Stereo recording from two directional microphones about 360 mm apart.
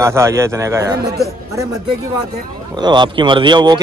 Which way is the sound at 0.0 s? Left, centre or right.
Centre.